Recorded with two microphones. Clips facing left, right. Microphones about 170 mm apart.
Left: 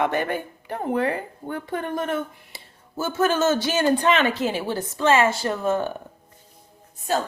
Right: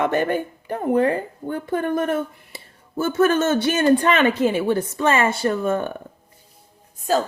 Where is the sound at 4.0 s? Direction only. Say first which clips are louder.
Right 3 dB; 55° right (ahead or behind).